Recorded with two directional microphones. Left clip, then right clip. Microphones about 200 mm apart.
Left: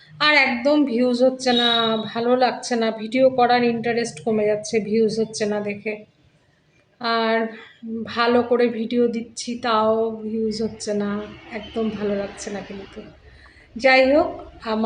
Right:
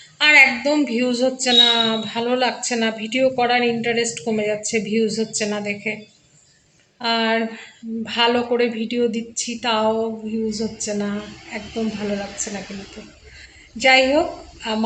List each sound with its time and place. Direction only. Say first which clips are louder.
0.2 s a woman's voice: right 4 dB; 5° left (ahead or behind)
7.0 s a woman's voice: right 1 dB; 5° left (ahead or behind)
13.7 s a woman's voice: even; 5° left (ahead or behind)